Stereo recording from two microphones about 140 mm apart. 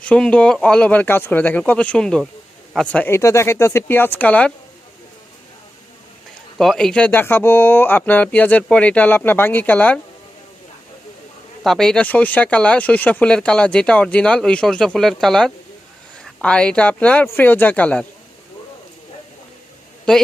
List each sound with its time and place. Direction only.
0.0 s speech: 10° left (ahead or behind)
3.2 s speech: 20° left (ahead or behind)
6.6 s speech: 5° left (ahead or behind)
11.6 s speech: 5° left (ahead or behind)